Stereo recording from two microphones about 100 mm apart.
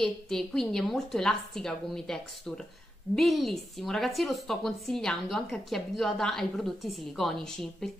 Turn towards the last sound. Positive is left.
turn(degrees=5)  # may be behind; listen again after turning